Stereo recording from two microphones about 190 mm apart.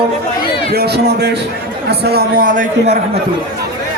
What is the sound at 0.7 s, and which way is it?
A man's voice, 55° right (ahead or behind).